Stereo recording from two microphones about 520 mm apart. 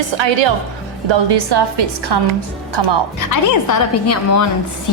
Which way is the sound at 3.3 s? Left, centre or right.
Left.